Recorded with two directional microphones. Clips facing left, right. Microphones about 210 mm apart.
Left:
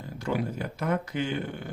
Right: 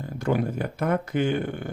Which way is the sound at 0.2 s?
50° right (ahead or behind).